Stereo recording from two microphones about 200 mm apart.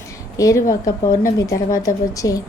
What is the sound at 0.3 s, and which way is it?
A woman's voice, 15° left (ahead or behind).